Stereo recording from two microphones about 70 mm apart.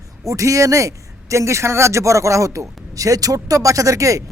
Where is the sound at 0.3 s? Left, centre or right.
Right.